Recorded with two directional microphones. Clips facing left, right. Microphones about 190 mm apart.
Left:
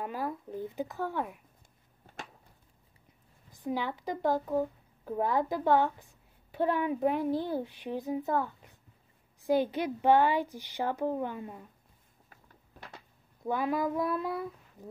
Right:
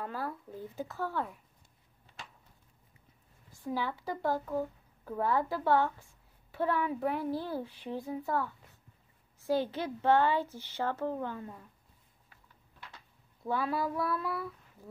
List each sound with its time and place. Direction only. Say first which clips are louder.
0.0 s a woman's voice: left 3 dB; 15° left (ahead or behind)
3.5 s a woman's voice: left 2 dB; 15° left (ahead or behind)
13.4 s speech: left 2 dB; 15° left (ahead or behind)